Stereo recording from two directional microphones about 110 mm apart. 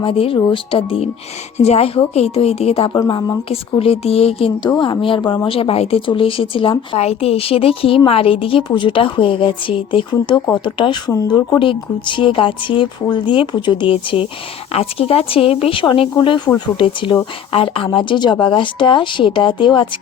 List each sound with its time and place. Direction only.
0.0 s speech: 55° left (ahead or behind)
1.5 s speech: 75° left (ahead or behind)
2.9 s a woman's voice: 40° left (ahead or behind)
3.5 s speech: 65° left (ahead or behind)
4.6 s speech: 40° left (ahead or behind); by 17.8 s 60° left (ahead or behind)
17.9 s speech: 45° left (ahead or behind)